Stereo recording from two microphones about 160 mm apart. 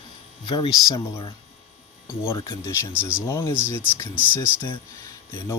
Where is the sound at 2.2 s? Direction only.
20° left (ahead or behind).